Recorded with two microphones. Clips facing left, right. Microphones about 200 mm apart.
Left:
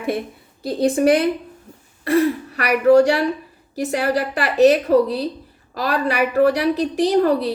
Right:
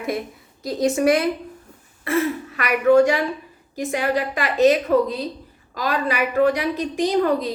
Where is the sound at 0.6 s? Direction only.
30° left (ahead or behind).